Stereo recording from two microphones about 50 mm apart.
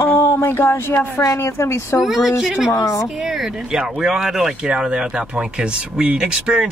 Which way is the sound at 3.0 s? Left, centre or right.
Centre.